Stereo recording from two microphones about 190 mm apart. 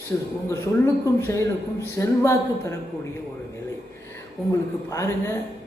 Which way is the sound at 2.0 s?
15° left (ahead or behind).